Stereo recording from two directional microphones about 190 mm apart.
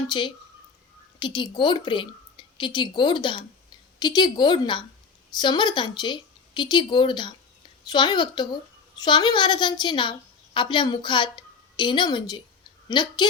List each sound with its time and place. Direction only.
0.1 s a woman's voice: 25° left (ahead or behind)